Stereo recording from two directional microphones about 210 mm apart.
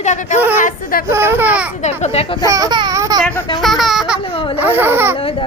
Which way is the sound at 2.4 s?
15° right (ahead or behind).